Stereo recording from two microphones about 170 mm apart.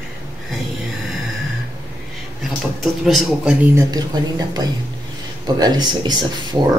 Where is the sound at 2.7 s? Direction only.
Centre (ahead or behind).